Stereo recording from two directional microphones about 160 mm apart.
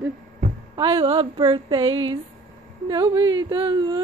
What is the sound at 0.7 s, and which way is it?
A woman's voice, 30° right (ahead or behind).